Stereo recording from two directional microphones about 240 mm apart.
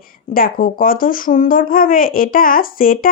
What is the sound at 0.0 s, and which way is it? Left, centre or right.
Speech, left.